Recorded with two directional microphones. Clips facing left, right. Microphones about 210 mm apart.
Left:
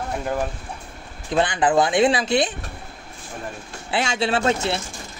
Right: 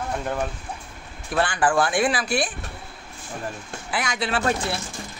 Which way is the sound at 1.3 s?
20° left (ahead or behind).